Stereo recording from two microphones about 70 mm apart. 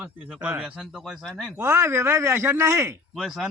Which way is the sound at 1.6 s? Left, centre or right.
Right.